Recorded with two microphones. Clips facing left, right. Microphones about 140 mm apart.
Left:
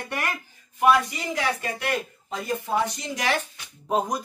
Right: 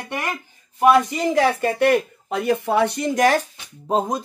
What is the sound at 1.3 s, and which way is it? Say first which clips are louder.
Speech: right 9 dB; 45° right (ahead or behind).